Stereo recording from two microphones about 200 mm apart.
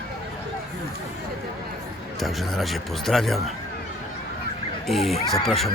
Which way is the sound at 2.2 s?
Centre (ahead or behind).